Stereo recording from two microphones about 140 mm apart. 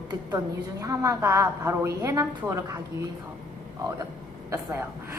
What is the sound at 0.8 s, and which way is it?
A woman's voice, 20° right (ahead or behind).